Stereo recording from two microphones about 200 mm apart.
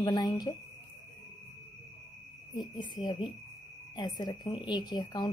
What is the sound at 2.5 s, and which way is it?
Speech, 20° left (ahead or behind).